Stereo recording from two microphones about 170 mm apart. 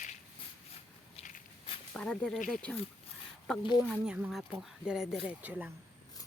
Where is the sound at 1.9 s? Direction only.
5° left (ahead or behind).